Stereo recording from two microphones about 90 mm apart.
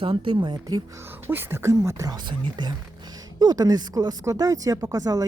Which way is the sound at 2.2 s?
60° right (ahead or behind).